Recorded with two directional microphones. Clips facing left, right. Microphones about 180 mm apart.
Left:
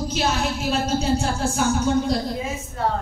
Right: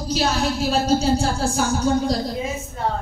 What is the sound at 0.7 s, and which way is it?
A woman's voice, 35° right (ahead or behind).